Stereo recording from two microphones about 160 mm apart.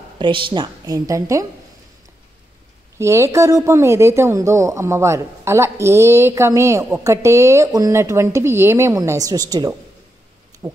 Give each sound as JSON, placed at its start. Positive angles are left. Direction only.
{"t": 0.2, "sound": "a woman's voice", "side_deg": -30}
{"t": 3.0, "sound": "speech", "side_deg": -15}
{"t": 10.6, "sound": "owl", "side_deg": -20}